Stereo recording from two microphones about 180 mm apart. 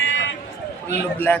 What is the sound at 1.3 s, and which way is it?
Speech, 10° left (ahead or behind).